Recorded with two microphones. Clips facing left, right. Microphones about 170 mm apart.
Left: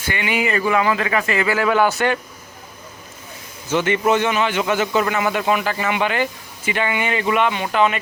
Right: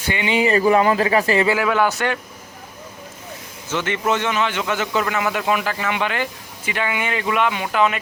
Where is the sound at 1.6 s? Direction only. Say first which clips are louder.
Left 2 dB; centre (ahead or behind).